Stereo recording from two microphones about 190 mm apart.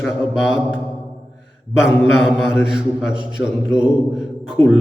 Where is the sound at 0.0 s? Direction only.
Centre (ahead or behind).